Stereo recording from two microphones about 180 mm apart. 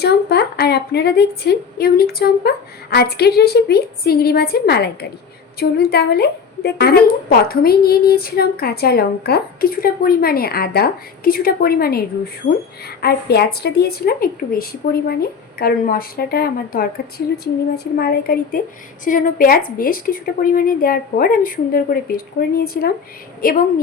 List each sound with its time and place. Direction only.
0.0 s a woman's voice: 65° left (ahead or behind)